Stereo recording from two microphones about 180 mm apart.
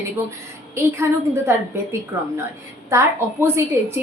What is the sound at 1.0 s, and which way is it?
A woman's voice, 15° right (ahead or behind).